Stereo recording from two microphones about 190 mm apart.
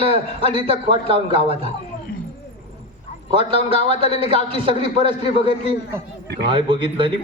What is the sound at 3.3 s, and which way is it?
A man's voice, 30° right (ahead or behind).